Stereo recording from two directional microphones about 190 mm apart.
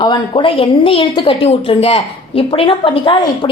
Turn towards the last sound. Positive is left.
turn(degrees=25)  # may be behind; listen again after turning